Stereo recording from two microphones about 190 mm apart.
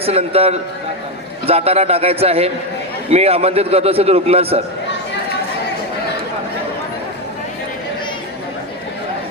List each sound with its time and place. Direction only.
0.0 s a man's voice: 30° right (ahead or behind)